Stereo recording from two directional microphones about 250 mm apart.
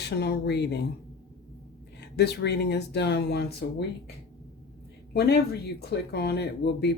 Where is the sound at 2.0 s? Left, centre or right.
Left.